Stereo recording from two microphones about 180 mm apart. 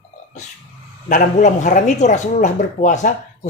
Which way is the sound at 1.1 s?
45° left (ahead or behind).